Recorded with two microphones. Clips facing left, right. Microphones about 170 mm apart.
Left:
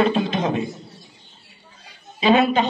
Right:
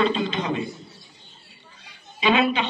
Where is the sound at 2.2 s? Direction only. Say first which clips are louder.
Left 4 dB; 40° left (ahead or behind).